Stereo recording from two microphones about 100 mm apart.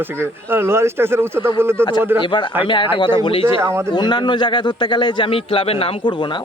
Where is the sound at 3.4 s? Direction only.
25° right (ahead or behind).